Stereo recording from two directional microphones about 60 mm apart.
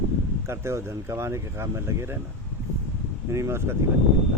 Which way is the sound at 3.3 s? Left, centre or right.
Right.